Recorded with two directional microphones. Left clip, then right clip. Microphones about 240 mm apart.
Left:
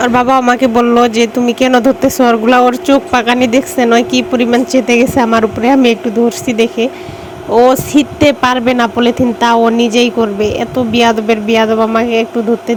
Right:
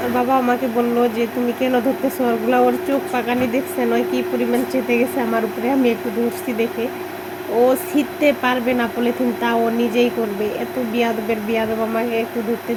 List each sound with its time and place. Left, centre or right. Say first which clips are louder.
0.2 s speech: left 6 dB; left